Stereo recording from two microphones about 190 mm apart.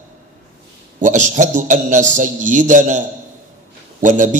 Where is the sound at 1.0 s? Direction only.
40° right (ahead or behind).